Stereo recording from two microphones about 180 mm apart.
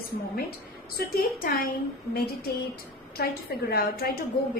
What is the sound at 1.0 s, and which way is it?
A woman's voice, 55° left (ahead or behind).